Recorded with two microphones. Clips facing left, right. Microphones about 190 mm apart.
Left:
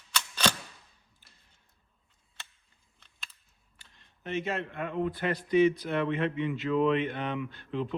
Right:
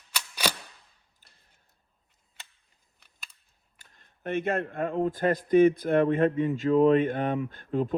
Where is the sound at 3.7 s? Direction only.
50° right (ahead or behind).